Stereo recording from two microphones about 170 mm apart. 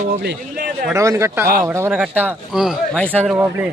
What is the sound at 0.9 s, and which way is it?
Speech, 20° right (ahead or behind).